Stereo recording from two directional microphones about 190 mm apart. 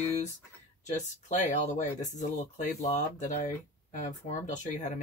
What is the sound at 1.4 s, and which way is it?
Speech, 40° left (ahead or behind).